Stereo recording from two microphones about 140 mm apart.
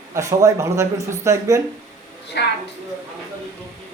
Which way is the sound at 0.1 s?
25° right (ahead or behind).